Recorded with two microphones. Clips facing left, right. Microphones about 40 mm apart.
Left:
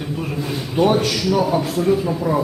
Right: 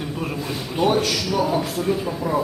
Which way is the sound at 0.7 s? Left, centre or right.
Centre.